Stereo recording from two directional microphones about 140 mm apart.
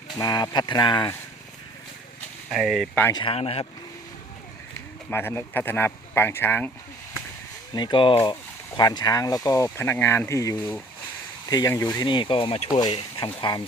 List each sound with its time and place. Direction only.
0.2 s speech: 25° left (ahead or behind)
2.5 s speech: centre (ahead or behind)
3.1 s speech: 30° left (ahead or behind)
3.3 s speech: 45° left (ahead or behind)
5.1 s speech: 15° left (ahead or behind)
7.7 s speech: 35° left (ahead or behind)
13.1 s speech: 30° left (ahead or behind)